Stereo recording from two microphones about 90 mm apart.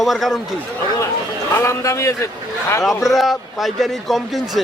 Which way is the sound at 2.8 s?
Centre (ahead or behind).